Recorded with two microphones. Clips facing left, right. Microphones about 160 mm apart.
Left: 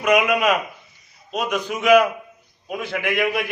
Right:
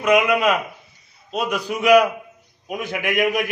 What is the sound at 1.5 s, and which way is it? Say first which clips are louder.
A man's voice: right 1 dB; 10° right (ahead or behind).